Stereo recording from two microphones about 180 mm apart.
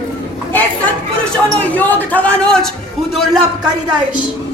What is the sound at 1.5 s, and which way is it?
A man's voice, 10° left (ahead or behind).